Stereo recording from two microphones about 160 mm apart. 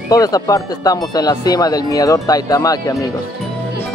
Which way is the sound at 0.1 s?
20° left (ahead or behind).